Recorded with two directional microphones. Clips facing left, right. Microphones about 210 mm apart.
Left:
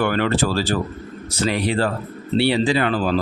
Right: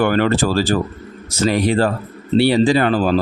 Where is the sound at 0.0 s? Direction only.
45° right (ahead or behind).